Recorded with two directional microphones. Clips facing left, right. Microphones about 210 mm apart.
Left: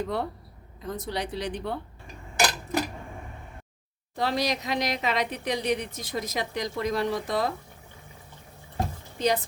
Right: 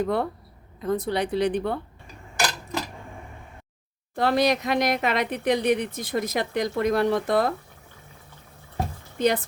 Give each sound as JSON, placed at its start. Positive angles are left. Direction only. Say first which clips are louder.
{"t": 0.0, "sound": "speech", "louder": "right 5 dB", "side_deg": -55}
{"t": 4.1, "sound": "speech", "louder": "right 6 dB", "side_deg": -55}
{"t": 9.1, "sound": "speech", "louder": "right 3 dB", "side_deg": -55}